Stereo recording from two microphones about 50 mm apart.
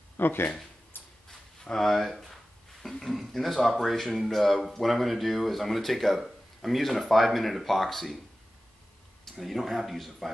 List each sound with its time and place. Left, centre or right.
0.2 s speech: left
0.9 s a sound: left
1.6 s speech: centre
9.2 s speech: centre